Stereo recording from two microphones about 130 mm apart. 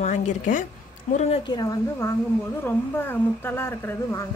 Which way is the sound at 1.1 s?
65° left (ahead or behind).